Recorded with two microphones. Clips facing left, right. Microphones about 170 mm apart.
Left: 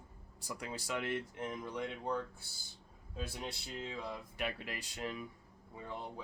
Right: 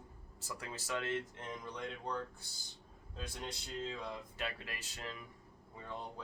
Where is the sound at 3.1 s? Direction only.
5° left (ahead or behind).